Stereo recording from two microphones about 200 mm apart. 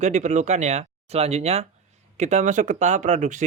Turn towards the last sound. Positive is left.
turn(degrees=-40)  # may be behind; listen again after turning